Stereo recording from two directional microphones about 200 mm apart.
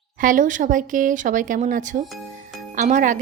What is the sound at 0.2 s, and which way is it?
Speech, 40° right (ahead or behind).